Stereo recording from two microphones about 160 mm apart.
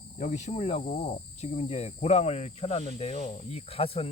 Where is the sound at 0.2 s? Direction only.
50° left (ahead or behind).